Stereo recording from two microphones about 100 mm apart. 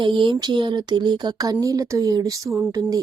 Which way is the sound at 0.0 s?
55° right (ahead or behind).